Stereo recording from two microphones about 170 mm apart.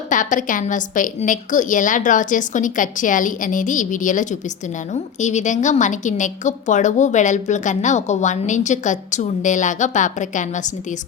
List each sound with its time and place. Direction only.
0.1 s a woman's voice: 50° left (ahead or behind)